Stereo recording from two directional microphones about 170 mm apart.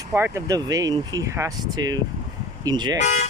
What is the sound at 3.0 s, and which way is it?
Speech, 45° left (ahead or behind).